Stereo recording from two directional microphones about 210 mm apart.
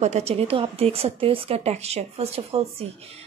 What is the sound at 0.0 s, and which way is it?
Speech, 30° right (ahead or behind).